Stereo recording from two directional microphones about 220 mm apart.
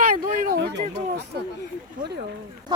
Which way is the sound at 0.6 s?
50° right (ahead or behind).